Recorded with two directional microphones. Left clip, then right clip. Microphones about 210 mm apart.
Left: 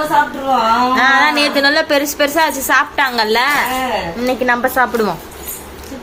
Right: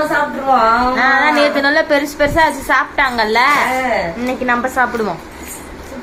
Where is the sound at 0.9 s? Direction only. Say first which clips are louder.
Even; 5° left (ahead or behind).